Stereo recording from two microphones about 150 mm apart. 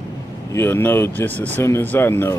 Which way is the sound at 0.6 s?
15° left (ahead or behind).